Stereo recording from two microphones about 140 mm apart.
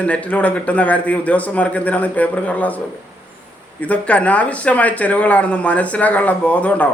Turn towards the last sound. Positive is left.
turn(degrees=10)  # may be behind; listen again after turning